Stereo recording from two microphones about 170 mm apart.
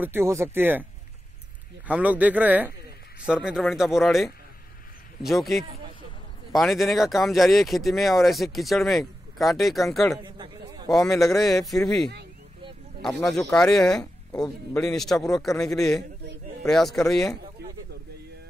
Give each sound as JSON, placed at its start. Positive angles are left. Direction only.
{"t": 0.0, "sound": "speech", "side_deg": -15}
{"t": 1.9, "sound": "speech", "side_deg": -10}
{"t": 10.2, "sound": "a sound", "side_deg": -25}
{"t": 11.1, "sound": "speech", "side_deg": 0}
{"t": 13.5, "sound": "speech", "side_deg": 0}
{"t": 14.3, "sound": "speech", "side_deg": 25}
{"t": 14.8, "sound": "speech", "side_deg": 5}